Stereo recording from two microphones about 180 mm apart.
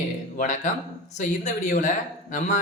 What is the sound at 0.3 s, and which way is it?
Speech, 45° left (ahead or behind).